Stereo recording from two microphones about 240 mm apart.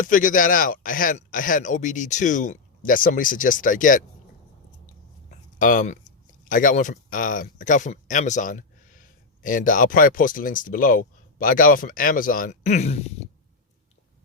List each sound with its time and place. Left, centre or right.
0.0 s speech: left
5.5 s speech: left